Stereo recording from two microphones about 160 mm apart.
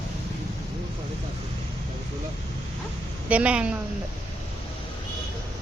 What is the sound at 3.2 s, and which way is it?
Speech, 10° right (ahead or behind).